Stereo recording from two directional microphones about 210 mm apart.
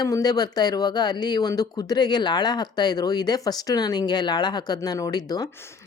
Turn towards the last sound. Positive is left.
turn(degrees=20)  # may be behind; listen again after turning